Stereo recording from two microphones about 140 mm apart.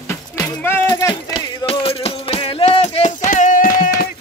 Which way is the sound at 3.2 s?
70° left (ahead or behind).